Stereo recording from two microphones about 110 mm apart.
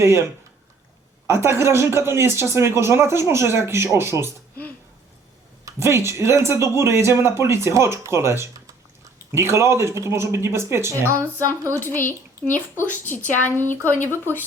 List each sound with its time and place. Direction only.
1.3 s speech: 25° right (ahead or behind)
5.6 s speech: 25° right (ahead or behind)
11.7 s speech: 20° left (ahead or behind)